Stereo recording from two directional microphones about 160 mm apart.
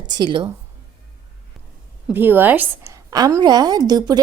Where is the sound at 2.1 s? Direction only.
10° right (ahead or behind).